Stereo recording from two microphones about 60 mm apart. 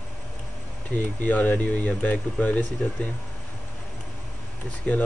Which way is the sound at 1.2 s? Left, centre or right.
Left.